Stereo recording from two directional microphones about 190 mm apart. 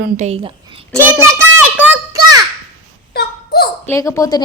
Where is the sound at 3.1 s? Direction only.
55° left (ahead or behind).